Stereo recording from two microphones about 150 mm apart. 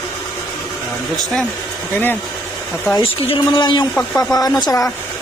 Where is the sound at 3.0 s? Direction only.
35° left (ahead or behind).